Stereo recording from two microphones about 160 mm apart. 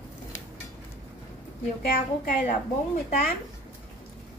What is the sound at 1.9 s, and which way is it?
A child's voice, 60° left (ahead or behind).